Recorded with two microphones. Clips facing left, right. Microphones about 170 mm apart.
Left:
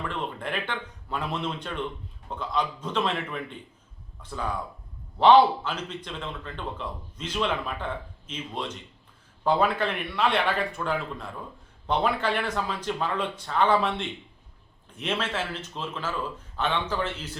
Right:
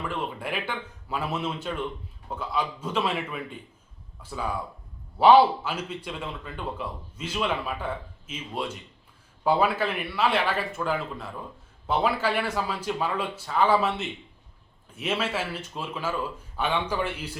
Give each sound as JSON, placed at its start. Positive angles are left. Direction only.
{"t": 0.0, "sound": "a man's voice", "side_deg": -10}